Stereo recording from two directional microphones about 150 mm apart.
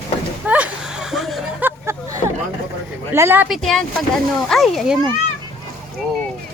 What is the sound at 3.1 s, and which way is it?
Speech, 15° right (ahead or behind).